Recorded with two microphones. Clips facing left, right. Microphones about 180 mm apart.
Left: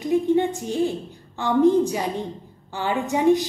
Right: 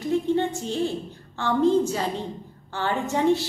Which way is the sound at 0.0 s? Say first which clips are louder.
Left 3 dB; 15° left (ahead or behind).